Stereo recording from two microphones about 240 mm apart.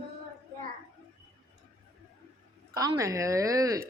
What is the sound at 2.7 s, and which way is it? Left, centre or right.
A woman's voice, centre.